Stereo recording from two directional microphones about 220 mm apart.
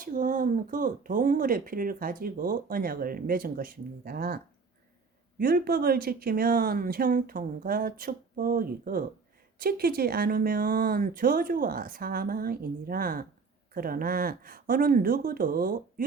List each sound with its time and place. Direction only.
0.0 s speech: 35° right (ahead or behind)
5.4 s speech: 40° right (ahead or behind)